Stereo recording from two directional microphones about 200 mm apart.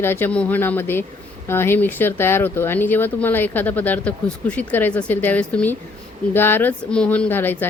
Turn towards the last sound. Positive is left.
turn(degrees=10)  # may be behind; listen again after turning